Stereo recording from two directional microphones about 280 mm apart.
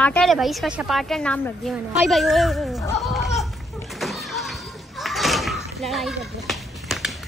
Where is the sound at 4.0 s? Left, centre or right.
Centre.